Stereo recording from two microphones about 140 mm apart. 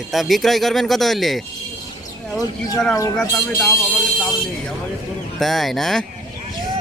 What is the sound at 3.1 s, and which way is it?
Speech, 10° left (ahead or behind).